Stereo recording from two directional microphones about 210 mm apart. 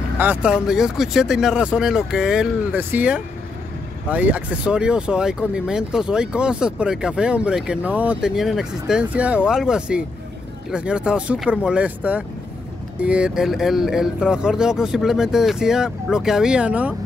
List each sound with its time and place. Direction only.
0.2 s speech: 5° right (ahead or behind)